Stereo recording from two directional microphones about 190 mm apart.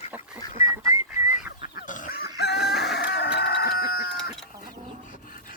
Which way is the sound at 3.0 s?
60° left (ahead or behind).